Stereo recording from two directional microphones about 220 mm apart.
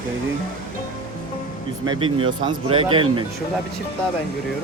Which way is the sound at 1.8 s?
20° right (ahead or behind).